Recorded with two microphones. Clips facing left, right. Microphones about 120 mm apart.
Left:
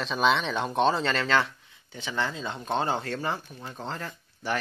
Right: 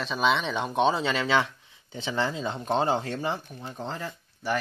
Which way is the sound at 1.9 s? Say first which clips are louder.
Right 2 dB; 25° right (ahead or behind).